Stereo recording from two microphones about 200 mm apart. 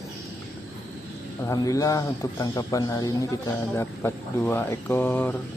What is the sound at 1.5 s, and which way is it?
Speech, 15° left (ahead or behind).